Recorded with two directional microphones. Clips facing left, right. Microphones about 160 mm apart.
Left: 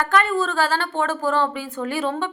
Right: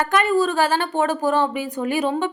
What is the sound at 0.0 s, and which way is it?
Speech, 15° right (ahead or behind).